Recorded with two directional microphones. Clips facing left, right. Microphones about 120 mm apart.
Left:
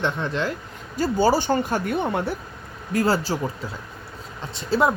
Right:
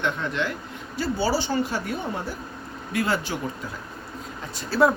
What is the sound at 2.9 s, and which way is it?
Speech, 40° left (ahead or behind).